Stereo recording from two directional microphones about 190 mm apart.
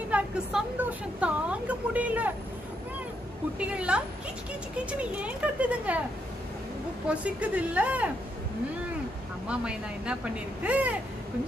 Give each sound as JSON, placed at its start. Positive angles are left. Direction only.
{"t": 0.1, "sound": "a woman's voice", "side_deg": -5}
{"t": 3.5, "sound": "a woman's voice", "side_deg": -5}
{"t": 7.1, "sound": "a woman's voice", "side_deg": -5}
{"t": 9.5, "sound": "a woman's voice", "side_deg": -5}